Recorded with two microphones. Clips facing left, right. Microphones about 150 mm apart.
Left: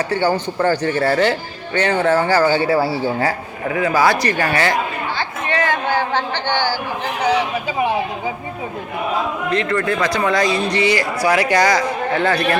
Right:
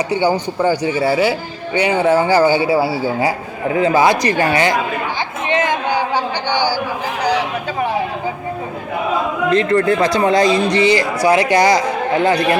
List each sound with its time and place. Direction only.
0.1 s a man's voice: 15° right (ahead or behind)
3.7 s speech: 25° right (ahead or behind)
5.5 s a sound: 20° right (ahead or behind)
7.2 s speech: centre (ahead or behind)
9.5 s speech: 30° right (ahead or behind); by 12.5 s 15° right (ahead or behind)